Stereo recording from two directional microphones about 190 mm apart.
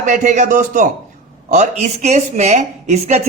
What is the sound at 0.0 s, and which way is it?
Speech, 40° right (ahead or behind).